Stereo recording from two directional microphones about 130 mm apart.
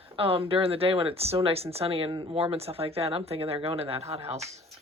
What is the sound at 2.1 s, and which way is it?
Speech, 35° right (ahead or behind).